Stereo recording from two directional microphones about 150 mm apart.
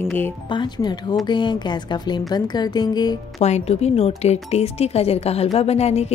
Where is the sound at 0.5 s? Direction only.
30° left (ahead or behind).